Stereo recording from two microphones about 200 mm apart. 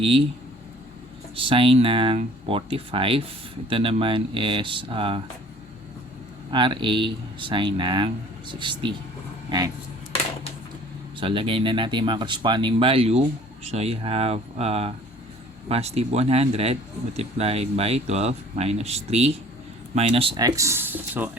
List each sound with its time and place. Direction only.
0.0 s speech: 25° right (ahead or behind)
1.4 s speech: 25° right (ahead or behind)
6.5 s speech: 25° right (ahead or behind)
11.2 s speech: 25° right (ahead or behind); by 21.2 s 10° right (ahead or behind)